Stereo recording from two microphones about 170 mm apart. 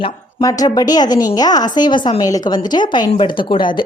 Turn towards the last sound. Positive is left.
turn(degrees=30)  # may be behind; listen again after turning